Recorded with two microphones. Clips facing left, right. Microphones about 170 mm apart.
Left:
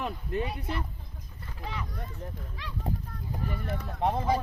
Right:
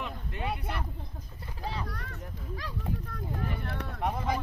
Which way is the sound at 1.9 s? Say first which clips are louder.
Left 1 dB; 75° right (ahead or behind).